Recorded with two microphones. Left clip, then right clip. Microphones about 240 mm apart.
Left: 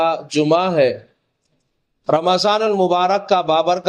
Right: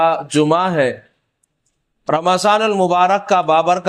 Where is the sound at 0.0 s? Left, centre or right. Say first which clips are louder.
Right 3 dB; right.